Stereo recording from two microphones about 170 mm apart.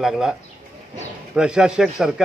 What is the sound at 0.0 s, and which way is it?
A man's voice, 5° right (ahead or behind).